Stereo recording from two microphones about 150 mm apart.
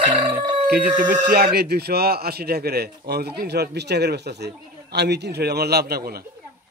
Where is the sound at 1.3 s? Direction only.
90° right.